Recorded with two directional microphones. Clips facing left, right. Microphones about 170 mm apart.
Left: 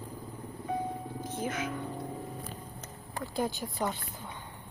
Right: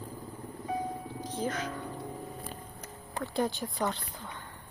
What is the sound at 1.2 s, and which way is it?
Music, 50° left (ahead or behind).